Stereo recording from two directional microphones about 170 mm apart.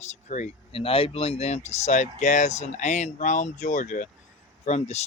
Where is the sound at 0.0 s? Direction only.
40° left (ahead or behind).